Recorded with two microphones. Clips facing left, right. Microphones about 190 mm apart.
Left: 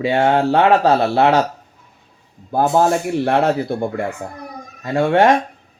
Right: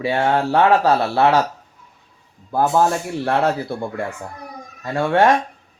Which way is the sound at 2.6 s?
30° left (ahead or behind).